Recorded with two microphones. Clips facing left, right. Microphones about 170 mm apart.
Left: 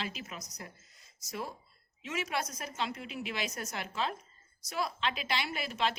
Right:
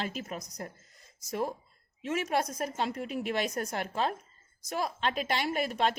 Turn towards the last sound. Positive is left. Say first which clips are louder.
# right 5 dB
turn(degrees=-50)  # may be behind; listen again after turning